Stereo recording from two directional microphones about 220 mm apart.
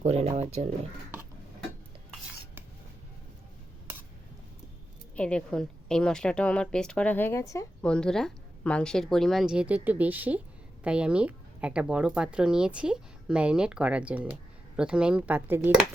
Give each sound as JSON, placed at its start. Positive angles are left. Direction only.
{"t": 0.0, "sound": "speech", "side_deg": -30}
{"t": 5.1, "sound": "speech", "side_deg": 5}
{"t": 7.9, "sound": "speech", "side_deg": 5}